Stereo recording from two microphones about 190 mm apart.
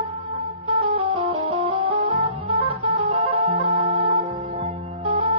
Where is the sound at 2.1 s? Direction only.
30° right (ahead or behind).